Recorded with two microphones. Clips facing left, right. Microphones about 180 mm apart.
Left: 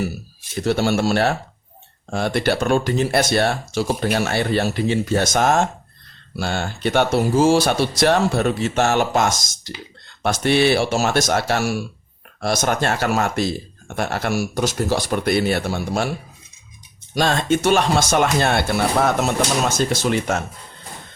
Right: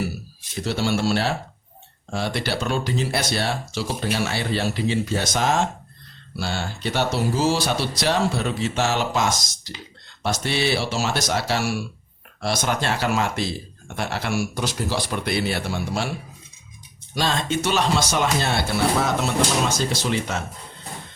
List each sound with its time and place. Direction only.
0.6 s speech: 50° left (ahead or behind)
17.2 s speech: 50° left (ahead or behind)